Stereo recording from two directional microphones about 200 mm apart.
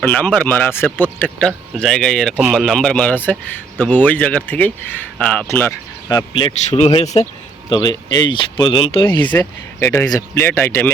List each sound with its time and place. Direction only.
0.0 s a man's voice: 5° left (ahead or behind); by 7.3 s 35° left (ahead or behind)
7.7 s speech: 20° left (ahead or behind)
9.3 s a man's voice: 10° left (ahead or behind)